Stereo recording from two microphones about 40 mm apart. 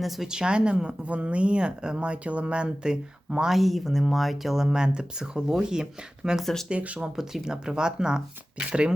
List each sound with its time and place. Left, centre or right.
0.3 s speech: centre
3.5 s speech: centre
6.7 s speech: right
7.0 s speech: centre